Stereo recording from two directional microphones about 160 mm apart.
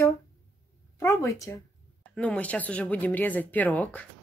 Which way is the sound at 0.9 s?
20° left (ahead or behind).